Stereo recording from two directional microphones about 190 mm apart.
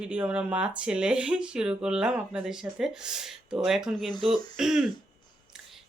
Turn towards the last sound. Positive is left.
turn(degrees=-5)  # may be behind; listen again after turning